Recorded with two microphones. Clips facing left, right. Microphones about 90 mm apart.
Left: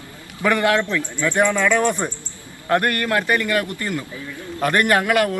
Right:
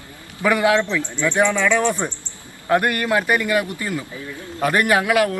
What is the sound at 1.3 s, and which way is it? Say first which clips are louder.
Speech: even; 10° left (ahead or behind).